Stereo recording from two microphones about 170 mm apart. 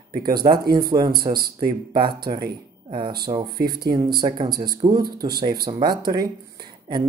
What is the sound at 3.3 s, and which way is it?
Speech, 25° right (ahead or behind).